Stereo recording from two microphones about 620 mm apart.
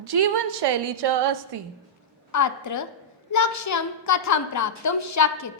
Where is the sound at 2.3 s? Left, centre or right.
Left.